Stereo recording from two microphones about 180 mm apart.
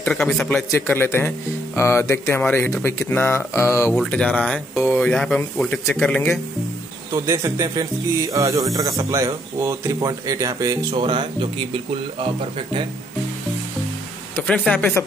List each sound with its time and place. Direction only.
0.0 s speech: 5° left (ahead or behind)
3.9 s speech: 5° left (ahead or behind)
7.2 s speech: 20° right (ahead or behind)
14.3 s speech: 5° left (ahead or behind)